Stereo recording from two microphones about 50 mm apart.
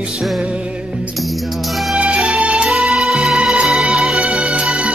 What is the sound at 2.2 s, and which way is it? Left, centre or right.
Music, centre.